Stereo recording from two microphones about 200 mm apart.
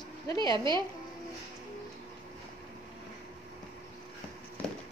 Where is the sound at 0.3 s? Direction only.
20° left (ahead or behind).